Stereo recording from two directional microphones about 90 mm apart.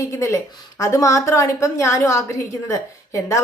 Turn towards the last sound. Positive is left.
turn(degrees=35)  # may be behind; listen again after turning